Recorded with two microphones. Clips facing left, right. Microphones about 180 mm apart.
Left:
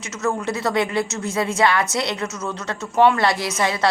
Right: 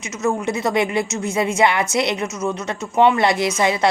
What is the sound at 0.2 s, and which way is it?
A woman's voice, 15° right (ahead or behind).